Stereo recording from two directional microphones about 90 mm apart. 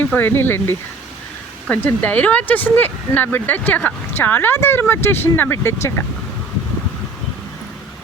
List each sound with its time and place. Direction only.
0.0 s speech: 20° left (ahead or behind)